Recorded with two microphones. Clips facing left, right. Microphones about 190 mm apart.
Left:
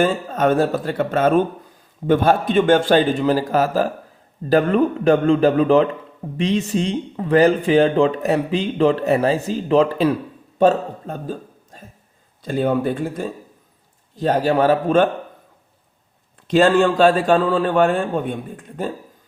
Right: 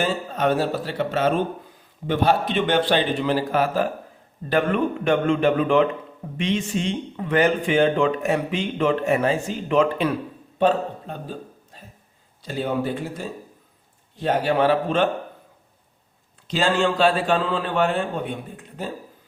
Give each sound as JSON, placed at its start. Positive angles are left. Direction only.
{"t": 0.0, "sound": "a man's voice", "side_deg": 50}
{"t": 14.2, "sound": "speech", "side_deg": 40}
{"t": 16.5, "sound": "a man's voice", "side_deg": 55}